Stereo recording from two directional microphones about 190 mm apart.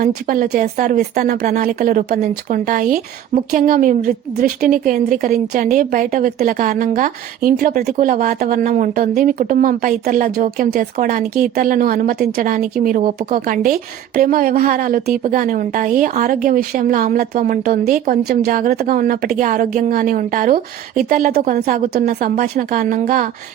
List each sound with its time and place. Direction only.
0.0 s a woman's voice: 50° right (ahead or behind)